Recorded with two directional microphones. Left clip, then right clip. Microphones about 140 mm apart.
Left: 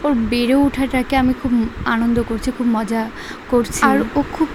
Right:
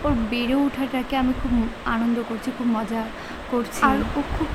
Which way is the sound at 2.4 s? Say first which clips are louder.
Left 5 dB; 30° left (ahead or behind).